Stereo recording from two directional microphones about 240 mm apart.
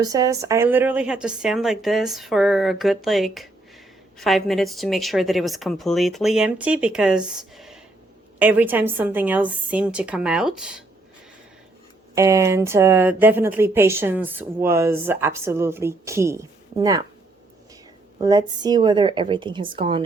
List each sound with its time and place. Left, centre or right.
0.0 s a woman's voice: centre
12.1 s speech: centre
18.2 s a woman's voice: centre